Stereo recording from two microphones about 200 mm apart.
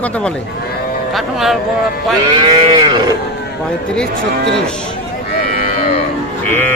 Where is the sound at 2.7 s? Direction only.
20° right (ahead or behind).